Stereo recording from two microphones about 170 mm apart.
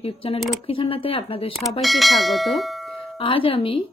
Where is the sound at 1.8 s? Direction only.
Centre (ahead or behind).